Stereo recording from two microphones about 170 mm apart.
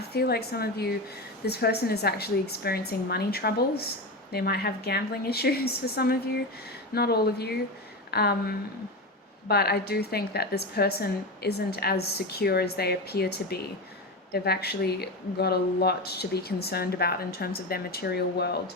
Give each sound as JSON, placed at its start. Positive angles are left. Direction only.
{"t": 0.1, "sound": "speech", "side_deg": 70}